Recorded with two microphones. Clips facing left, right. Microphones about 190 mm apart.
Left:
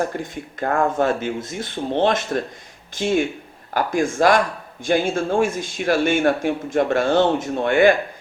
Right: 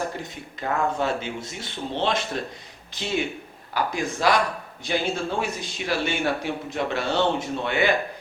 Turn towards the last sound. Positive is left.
turn(degrees=50)  # may be behind; listen again after turning